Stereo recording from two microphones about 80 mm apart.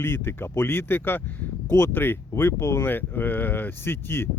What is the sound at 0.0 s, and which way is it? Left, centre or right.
Speech, left.